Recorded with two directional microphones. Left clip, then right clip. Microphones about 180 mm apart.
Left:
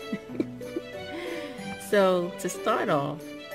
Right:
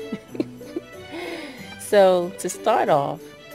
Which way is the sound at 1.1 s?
20° left (ahead or behind).